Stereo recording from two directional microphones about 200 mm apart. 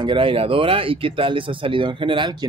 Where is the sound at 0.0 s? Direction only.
25° right (ahead or behind).